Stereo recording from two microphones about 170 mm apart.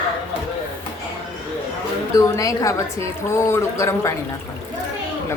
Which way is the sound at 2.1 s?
20° left (ahead or behind).